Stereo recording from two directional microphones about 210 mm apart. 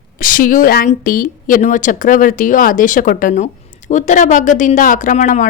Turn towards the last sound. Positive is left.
turn(degrees=35)  # may be behind; listen again after turning